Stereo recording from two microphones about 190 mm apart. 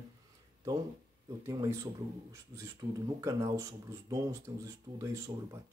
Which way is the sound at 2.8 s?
25° right (ahead or behind).